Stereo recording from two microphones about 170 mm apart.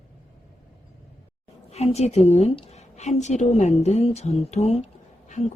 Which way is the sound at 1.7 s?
40° left (ahead or behind).